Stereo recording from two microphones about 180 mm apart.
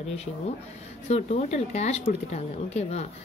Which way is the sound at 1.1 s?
40° left (ahead or behind).